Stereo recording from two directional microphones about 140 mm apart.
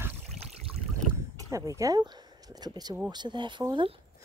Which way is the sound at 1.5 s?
25° right (ahead or behind).